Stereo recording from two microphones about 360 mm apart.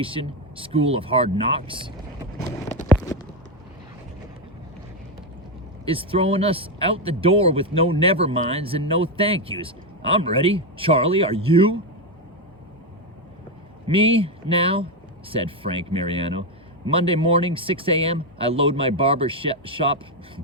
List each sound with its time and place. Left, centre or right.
0.0 s speech: centre
5.8 s speech: centre
13.8 s speech: centre